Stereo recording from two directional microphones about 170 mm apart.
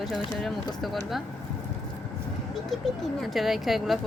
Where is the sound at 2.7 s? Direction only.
Centre (ahead or behind).